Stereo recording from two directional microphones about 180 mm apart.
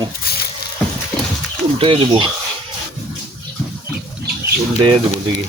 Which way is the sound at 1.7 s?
30° right (ahead or behind).